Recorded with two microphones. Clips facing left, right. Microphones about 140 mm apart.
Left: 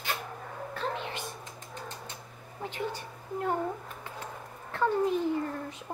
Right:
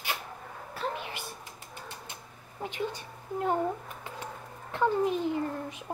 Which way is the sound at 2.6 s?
15° right (ahead or behind).